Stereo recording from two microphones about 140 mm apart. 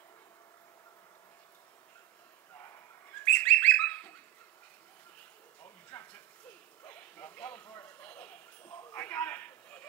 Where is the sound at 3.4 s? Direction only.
10° left (ahead or behind).